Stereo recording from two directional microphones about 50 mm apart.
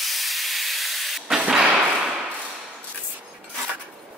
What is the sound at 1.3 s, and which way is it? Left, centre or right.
Thump, right.